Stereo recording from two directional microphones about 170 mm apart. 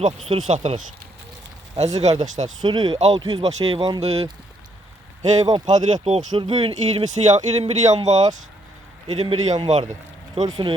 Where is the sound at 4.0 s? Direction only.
40° right (ahead or behind).